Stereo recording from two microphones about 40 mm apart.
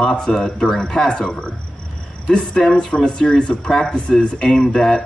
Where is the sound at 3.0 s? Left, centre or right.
Left.